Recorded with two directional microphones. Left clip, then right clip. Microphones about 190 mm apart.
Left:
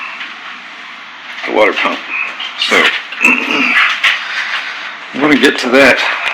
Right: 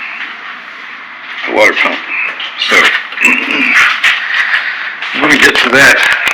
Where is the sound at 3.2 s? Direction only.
20° left (ahead or behind).